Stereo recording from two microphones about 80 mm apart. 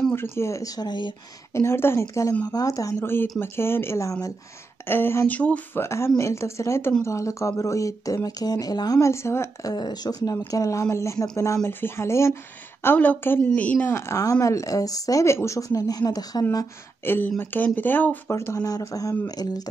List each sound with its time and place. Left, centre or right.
0.1 s speech: left
0.7 s speech: left
1.5 s speech: left
4.8 s speech: left
5.8 s speech: left
9.0 s speech: left
9.6 s speech: left
10.5 s speech: left
12.8 s speech: left
13.8 s speech: left
17.0 s speech: left
18.3 s speech: left